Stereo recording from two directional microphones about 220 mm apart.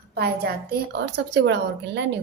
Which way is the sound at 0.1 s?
45° right (ahead or behind).